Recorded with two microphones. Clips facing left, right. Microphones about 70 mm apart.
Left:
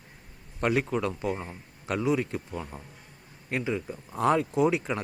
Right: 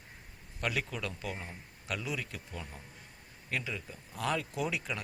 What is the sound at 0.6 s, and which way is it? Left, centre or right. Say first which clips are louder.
A man's voice: left 9 dB; left.